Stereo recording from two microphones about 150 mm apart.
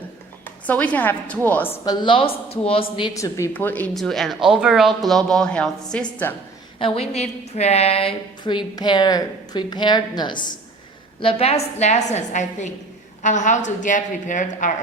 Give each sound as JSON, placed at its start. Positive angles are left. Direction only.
{"t": 0.4, "sound": "a woman's voice", "side_deg": 10}
{"t": 1.8, "sound": "a woman's voice", "side_deg": 30}
{"t": 3.2, "sound": "a woman's voice", "side_deg": 20}
{"t": 6.7, "sound": "a woman's voice", "side_deg": 40}
{"t": 11.2, "sound": "a woman's voice", "side_deg": 40}